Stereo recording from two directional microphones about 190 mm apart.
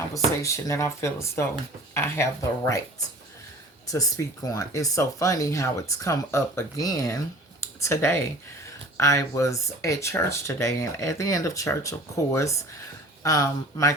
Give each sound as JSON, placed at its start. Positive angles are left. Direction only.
{"t": 0.4, "sound": "speech", "side_deg": 15}
{"t": 4.4, "sound": "speech", "side_deg": 15}